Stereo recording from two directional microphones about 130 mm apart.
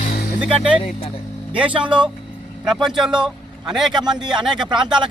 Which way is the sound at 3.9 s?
35° right (ahead or behind).